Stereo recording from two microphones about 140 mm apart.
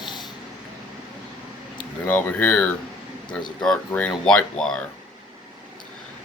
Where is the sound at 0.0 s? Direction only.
30° left (ahead or behind).